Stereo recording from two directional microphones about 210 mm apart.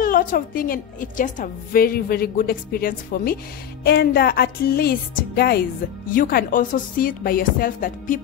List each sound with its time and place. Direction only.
0.0 s a woman's voice: 40° left (ahead or behind)